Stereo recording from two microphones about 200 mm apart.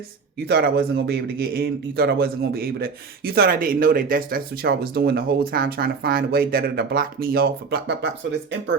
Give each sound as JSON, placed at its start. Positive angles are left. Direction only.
{"t": 0.4, "sound": "a man's voice", "side_deg": -55}